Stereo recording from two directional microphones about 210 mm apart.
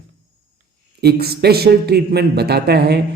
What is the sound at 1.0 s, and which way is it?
A man's voice, 50° right (ahead or behind).